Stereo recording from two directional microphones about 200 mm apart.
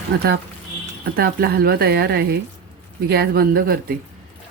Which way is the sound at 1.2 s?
50° right (ahead or behind).